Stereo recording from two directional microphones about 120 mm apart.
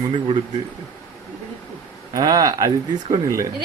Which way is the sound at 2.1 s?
35° right (ahead or behind).